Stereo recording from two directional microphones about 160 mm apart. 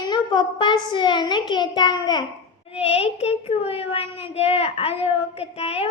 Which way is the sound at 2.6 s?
40° left (ahead or behind).